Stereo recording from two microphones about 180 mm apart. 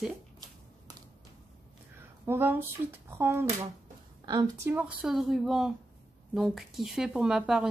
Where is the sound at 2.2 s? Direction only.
10° right (ahead or behind).